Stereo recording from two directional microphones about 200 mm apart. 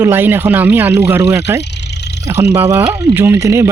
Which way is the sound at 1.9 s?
55° left (ahead or behind).